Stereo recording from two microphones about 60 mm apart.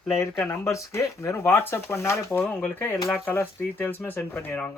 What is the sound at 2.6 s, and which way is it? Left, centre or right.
Speech, left.